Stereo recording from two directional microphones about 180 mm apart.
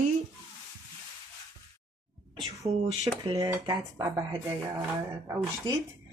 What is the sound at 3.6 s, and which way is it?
Speech, 25° right (ahead or behind).